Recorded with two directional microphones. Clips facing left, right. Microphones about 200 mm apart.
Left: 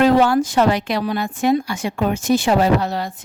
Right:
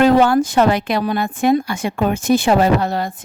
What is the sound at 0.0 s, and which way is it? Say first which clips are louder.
A woman's voice: right 2 dB; 55° right (ahead or behind).